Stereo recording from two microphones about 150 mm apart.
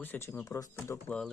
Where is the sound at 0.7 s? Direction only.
10° left (ahead or behind).